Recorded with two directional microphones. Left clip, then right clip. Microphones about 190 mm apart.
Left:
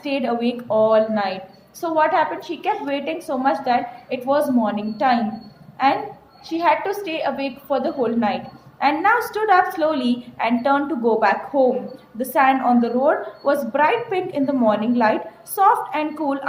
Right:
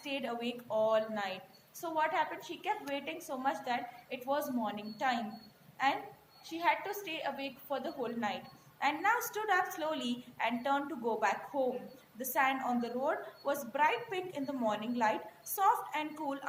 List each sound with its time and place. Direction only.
0.0 s a woman's voice: 45° left (ahead or behind)